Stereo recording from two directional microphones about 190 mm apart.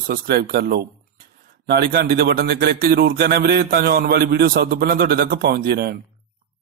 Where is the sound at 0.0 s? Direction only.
50° right (ahead or behind).